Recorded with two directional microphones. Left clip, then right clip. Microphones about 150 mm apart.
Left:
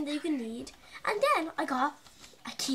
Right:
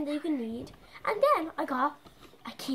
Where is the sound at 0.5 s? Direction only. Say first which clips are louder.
Right 1 dB; 10° left (ahead or behind).